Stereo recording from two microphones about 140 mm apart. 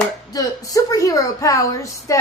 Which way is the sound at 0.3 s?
25° left (ahead or behind).